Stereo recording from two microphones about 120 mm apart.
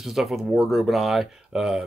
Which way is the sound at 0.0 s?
Centre (ahead or behind).